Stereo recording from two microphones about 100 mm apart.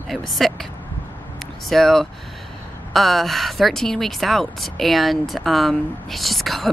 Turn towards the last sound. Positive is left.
turn(degrees=0)  # may be behind; listen again after turning